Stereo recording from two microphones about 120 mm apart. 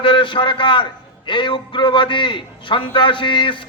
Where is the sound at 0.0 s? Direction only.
45° left (ahead or behind).